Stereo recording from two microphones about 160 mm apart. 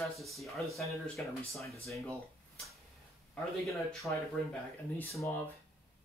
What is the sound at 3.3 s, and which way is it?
Speech, centre (ahead or behind).